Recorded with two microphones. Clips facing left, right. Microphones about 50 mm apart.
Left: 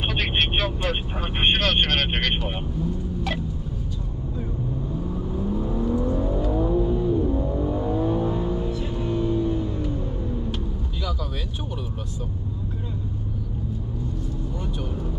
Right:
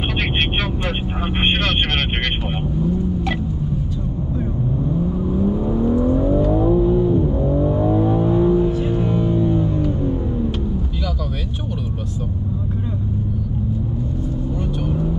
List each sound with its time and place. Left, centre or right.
0.2 s vehicle: centre
1.4 s speech: centre
5.1 s vehicle: centre
8.9 s music: right
9.1 s music: centre